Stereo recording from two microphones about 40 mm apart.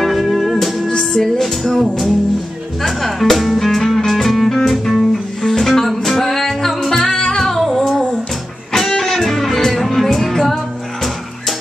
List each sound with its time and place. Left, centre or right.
0.0 s music: centre
0.9 s music: centre
7.4 s music: centre